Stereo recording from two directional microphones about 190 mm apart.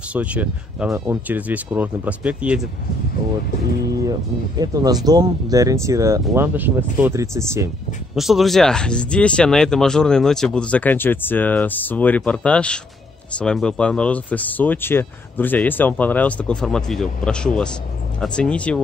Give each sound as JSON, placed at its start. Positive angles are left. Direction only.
{"t": 0.1, "sound": "speech", "side_deg": -5}
{"t": 4.6, "sound": "speech", "side_deg": -20}
{"t": 8.2, "sound": "speech", "side_deg": 0}